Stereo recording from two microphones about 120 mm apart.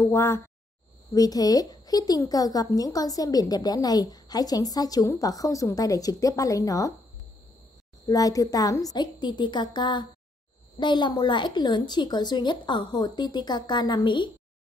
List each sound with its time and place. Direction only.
0.0 s speech: 20° left (ahead or behind)
1.1 s speech: 30° left (ahead or behind)
8.1 s speech: 30° left (ahead or behind)